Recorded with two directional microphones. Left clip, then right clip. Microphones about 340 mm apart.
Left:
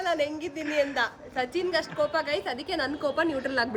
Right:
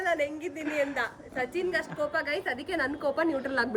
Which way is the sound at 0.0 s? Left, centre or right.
Centre.